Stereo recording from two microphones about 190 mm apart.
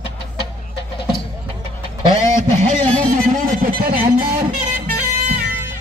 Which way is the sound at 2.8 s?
5° left (ahead or behind).